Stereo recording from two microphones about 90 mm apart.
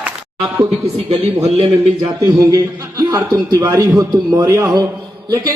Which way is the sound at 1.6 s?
50° right (ahead or behind).